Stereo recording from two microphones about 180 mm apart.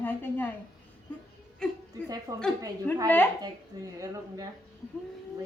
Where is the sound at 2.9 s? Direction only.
5° left (ahead or behind).